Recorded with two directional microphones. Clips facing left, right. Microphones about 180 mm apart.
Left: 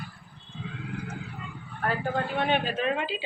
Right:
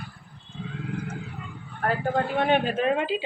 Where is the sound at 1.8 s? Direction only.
45° right (ahead or behind).